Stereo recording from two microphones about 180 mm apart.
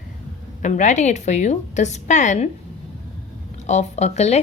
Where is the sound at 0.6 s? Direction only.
45° left (ahead or behind).